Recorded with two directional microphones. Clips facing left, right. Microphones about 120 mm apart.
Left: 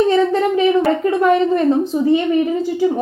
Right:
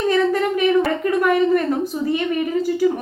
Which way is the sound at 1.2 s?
25° left (ahead or behind).